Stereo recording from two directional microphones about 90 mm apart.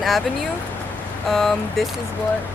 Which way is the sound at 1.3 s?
5° left (ahead or behind).